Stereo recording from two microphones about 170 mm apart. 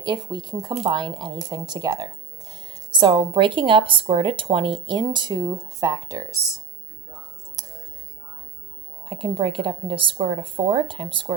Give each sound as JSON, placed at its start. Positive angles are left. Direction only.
{"t": 0.0, "sound": "speech", "side_deg": -25}
{"t": 9.0, "sound": "speech", "side_deg": -30}